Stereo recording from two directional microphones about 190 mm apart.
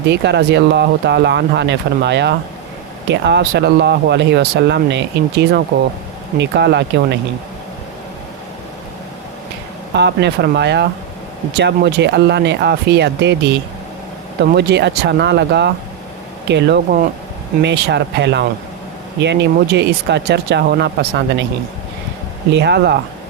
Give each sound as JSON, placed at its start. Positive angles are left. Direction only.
{"t": 0.0, "sound": "speech", "side_deg": -65}
{"t": 9.9, "sound": "speech", "side_deg": -65}
{"t": 22.5, "sound": "speech", "side_deg": -60}